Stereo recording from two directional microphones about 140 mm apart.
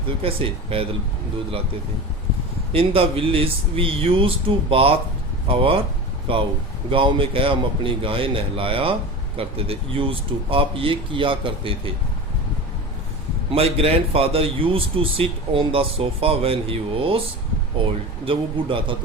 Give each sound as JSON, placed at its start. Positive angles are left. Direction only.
{"t": 0.2, "sound": "a man's voice", "side_deg": -40}
{"t": 2.7, "sound": "speech", "side_deg": -40}
{"t": 13.5, "sound": "a man's voice", "side_deg": -45}
{"t": 18.3, "sound": "speech", "side_deg": -40}